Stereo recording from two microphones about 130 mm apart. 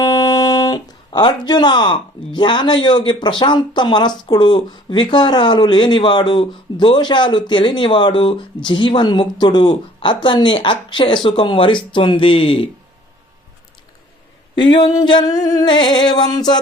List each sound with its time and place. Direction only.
0.0 s speech: 30° left (ahead or behind)
14.5 s speech: 35° left (ahead or behind)